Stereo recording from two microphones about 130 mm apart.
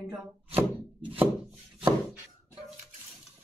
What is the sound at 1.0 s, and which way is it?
Wood, 15° right (ahead or behind).